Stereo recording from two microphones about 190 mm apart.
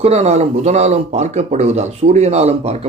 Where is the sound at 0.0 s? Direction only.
35° right (ahead or behind).